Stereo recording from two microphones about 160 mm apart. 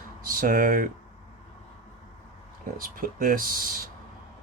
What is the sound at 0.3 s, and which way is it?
Speech, 60° right (ahead or behind).